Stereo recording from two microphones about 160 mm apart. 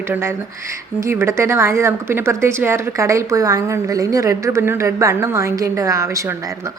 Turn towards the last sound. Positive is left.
turn(degrees=-20)  # may be behind; listen again after turning